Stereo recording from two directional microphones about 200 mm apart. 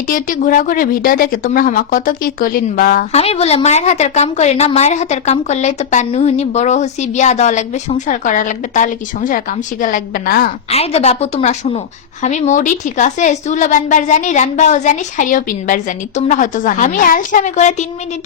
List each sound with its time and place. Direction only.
0.1 s speech: 45° left (ahead or behind)
3.1 s speech: 30° left (ahead or behind); by 10.5 s 50° left (ahead or behind)
10.7 s speech: 30° left (ahead or behind)